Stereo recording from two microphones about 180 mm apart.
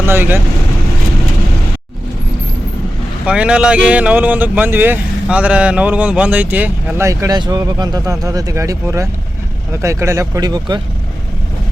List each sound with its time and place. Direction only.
0.0 s speech: 10° right (ahead or behind)
3.2 s speech: 5° right (ahead or behind); by 10.8 s 20° right (ahead or behind)